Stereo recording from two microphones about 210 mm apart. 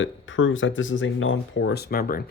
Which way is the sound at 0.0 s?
65° left (ahead or behind).